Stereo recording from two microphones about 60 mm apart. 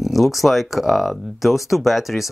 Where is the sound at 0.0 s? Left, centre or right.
Centre.